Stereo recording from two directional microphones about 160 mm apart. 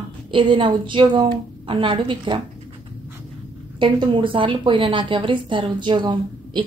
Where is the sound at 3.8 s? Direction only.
30° right (ahead or behind).